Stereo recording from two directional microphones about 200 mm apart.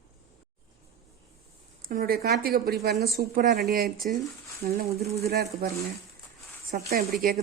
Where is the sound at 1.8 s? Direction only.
45° right (ahead or behind).